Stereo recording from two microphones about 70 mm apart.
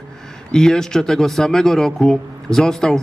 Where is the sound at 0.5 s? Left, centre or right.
Centre.